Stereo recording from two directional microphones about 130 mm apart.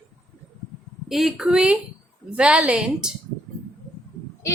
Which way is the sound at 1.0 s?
5° right (ahead or behind).